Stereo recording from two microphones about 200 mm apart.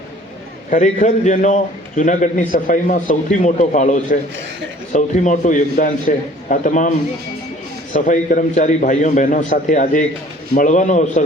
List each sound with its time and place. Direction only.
0.7 s a man's voice: 40° left (ahead or behind)
7.9 s a man's voice: 40° left (ahead or behind)